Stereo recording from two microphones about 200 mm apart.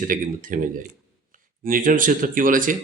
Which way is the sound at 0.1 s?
40° right (ahead or behind).